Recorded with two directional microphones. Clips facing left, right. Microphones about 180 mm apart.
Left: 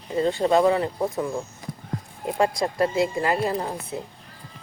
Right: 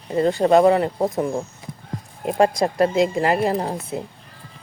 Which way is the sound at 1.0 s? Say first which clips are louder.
Right 4 dB; 20° right (ahead or behind).